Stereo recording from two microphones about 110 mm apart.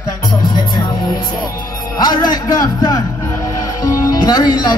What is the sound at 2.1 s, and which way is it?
Music, 40° left (ahead or behind).